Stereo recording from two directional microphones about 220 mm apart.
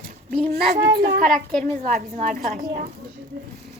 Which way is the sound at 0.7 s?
45° right (ahead or behind).